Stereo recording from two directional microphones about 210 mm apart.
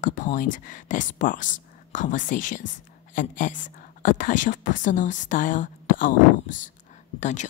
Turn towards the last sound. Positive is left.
turn(degrees=35)  # may be behind; listen again after turning